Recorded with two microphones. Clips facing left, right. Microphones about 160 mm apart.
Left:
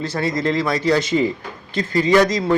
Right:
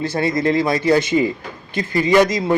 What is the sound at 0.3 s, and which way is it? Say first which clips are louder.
Speech: right 2 dB; 55° right (ahead or behind).